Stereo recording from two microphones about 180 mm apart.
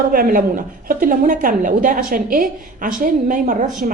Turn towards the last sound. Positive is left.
turn(degrees=-45)  # may be behind; listen again after turning